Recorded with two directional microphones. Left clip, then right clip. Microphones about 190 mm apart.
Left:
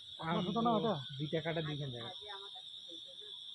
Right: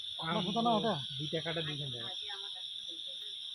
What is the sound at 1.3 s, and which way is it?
Speech, 20° left (ahead or behind).